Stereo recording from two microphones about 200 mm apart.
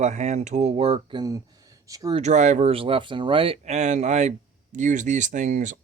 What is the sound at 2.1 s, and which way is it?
Speech, 35° right (ahead or behind).